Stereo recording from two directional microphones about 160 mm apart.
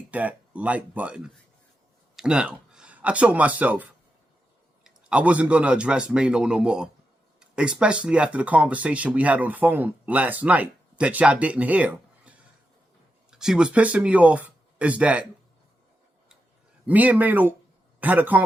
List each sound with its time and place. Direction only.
0.1 s a man's voice: 10° right (ahead or behind)
16.8 s speech: 10° right (ahead or behind)